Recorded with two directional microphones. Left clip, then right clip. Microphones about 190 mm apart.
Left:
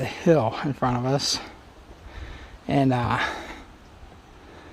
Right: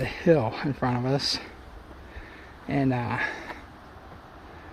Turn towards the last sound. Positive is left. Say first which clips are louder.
# left 4 dB
turn(degrees=30)  # may be behind; listen again after turning